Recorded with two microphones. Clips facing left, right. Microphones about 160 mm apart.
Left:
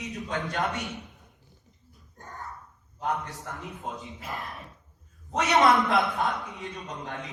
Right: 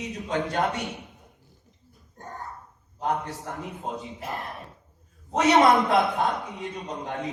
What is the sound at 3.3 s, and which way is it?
Speech, 20° right (ahead or behind).